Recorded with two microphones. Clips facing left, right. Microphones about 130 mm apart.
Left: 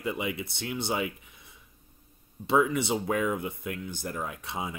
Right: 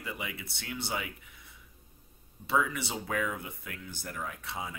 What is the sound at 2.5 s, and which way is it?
Speech, 20° left (ahead or behind).